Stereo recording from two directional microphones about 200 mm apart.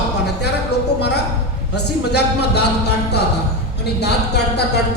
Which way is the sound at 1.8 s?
55° left (ahead or behind).